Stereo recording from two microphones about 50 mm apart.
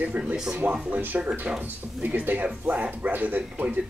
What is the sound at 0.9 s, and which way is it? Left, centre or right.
A man's voice, right.